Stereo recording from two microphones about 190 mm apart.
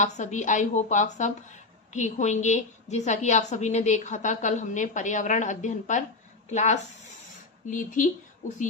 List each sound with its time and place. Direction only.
0.0 s a woman's voice: 40° left (ahead or behind)